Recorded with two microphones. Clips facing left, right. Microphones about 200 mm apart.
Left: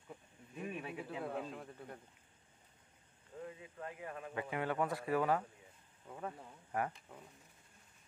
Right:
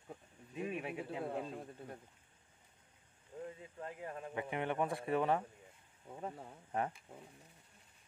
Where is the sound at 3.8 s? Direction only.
30° right (ahead or behind).